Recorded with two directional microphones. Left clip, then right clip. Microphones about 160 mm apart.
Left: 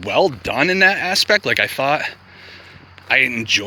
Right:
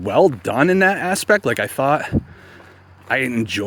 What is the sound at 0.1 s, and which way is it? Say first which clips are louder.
Speech: right 2 dB; 75° right (ahead or behind).